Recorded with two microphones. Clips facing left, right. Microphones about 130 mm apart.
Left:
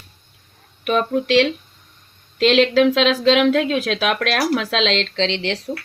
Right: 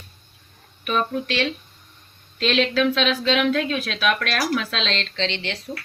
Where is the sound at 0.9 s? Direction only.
70° left (ahead or behind); by 5.5 s 90° left.